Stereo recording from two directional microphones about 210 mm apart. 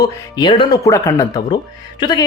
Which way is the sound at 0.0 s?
20° left (ahead or behind).